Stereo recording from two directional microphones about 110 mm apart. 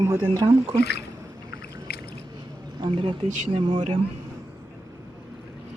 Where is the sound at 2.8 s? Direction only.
50° right (ahead or behind).